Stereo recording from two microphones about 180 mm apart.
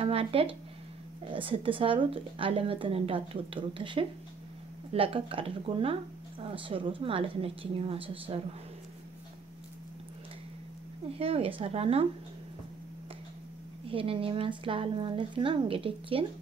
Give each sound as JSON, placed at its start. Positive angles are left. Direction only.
{"t": 0.0, "sound": "a woman's voice", "side_deg": -30}
{"t": 11.1, "sound": "a woman's voice", "side_deg": -35}
{"t": 13.8, "sound": "a woman's voice", "side_deg": -30}